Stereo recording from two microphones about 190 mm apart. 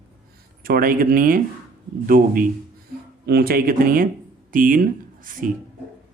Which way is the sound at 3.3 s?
55° right (ahead or behind).